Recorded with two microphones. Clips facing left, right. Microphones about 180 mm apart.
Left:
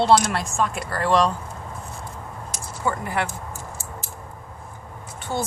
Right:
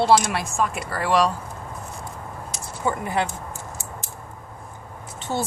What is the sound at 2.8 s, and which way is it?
Speech, 20° right (ahead or behind).